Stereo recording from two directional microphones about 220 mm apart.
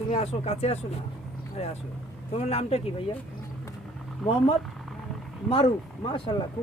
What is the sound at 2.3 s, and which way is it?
Speech, 30° left (ahead or behind).